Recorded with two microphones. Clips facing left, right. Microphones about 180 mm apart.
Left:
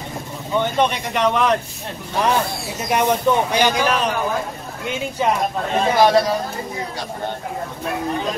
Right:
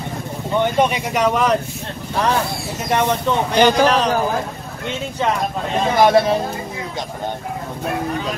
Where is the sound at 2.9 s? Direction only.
10° left (ahead or behind).